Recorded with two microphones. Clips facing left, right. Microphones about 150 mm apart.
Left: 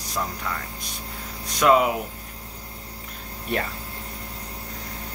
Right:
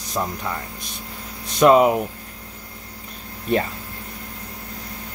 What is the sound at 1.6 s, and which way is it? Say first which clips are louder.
Speech: right 5 dB; 30° right (ahead or behind).